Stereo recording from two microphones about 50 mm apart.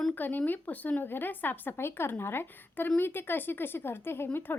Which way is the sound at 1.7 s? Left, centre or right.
Left.